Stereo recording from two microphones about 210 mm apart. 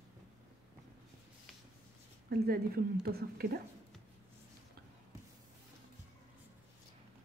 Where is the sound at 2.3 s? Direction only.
45° right (ahead or behind).